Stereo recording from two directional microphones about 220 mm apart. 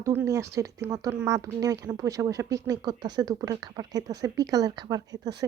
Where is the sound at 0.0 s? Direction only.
10° right (ahead or behind).